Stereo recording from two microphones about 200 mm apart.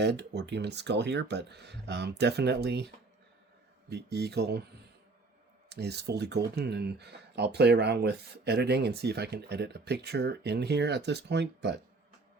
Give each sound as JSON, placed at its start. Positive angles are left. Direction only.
{"t": 0.0, "sound": "speech", "side_deg": -55}
{"t": 5.6, "sound": "speech", "side_deg": -55}